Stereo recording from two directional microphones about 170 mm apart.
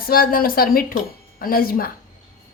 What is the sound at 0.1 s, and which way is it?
Speech, 60° left (ahead or behind).